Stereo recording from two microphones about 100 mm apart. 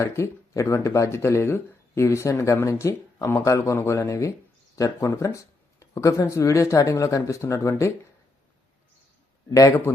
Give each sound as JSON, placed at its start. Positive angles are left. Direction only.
{"t": 0.0, "sound": "speech", "side_deg": 30}
{"t": 9.5, "sound": "speech", "side_deg": 35}